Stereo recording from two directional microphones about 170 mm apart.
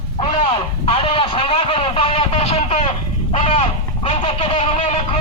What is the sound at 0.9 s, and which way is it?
Vehicle, 30° left (ahead or behind).